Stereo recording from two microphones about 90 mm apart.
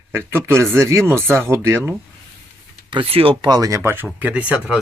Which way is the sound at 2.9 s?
80° right.